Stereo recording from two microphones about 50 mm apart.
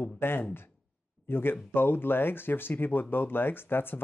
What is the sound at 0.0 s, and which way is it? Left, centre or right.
Speech, left.